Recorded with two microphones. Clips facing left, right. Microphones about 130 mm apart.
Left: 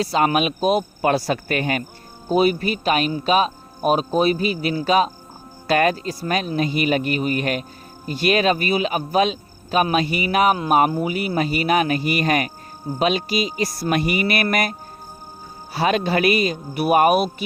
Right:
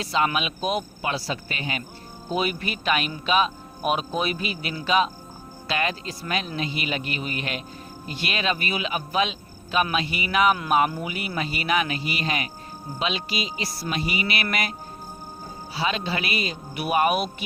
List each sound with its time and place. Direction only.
0.0 s speech: 40° left (ahead or behind); by 1.8 s 55° left (ahead or behind)
2.3 s speech: 40° left (ahead or behind)